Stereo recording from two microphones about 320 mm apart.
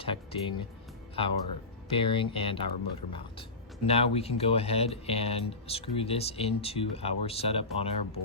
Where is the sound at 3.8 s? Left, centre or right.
Centre.